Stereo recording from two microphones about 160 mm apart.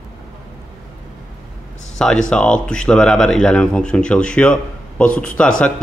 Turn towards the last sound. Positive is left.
turn(degrees=5)  # may be behind; listen again after turning